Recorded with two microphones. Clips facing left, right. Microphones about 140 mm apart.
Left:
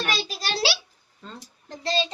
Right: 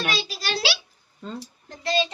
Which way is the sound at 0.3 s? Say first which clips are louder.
Left 1 dB; 40° left (ahead or behind).